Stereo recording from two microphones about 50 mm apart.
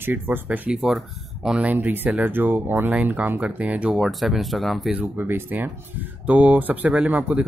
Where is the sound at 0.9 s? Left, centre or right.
Centre.